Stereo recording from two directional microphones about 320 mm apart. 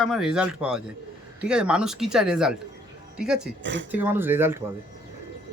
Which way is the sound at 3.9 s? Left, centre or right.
Centre.